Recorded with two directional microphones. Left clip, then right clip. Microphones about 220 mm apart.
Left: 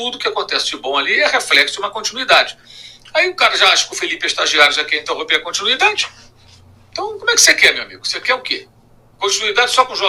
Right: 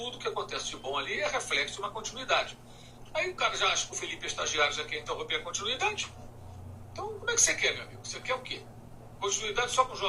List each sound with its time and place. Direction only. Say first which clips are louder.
0.0 s a man's voice: left 15 dB; 45° left (ahead or behind)